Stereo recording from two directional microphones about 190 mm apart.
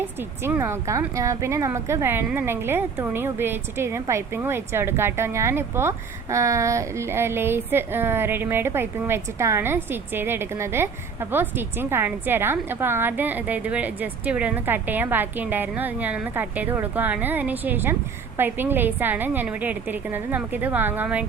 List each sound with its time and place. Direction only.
0.2 s a woman's voice: 10° right (ahead or behind)